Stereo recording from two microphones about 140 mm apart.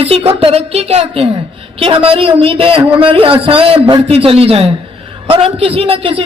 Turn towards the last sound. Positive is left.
turn(degrees=-40)  # may be behind; listen again after turning